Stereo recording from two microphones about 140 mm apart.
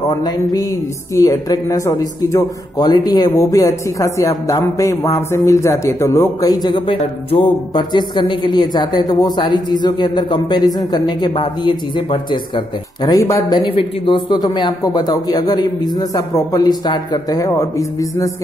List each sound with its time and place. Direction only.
0.2 s a man's voice: 25° left (ahead or behind)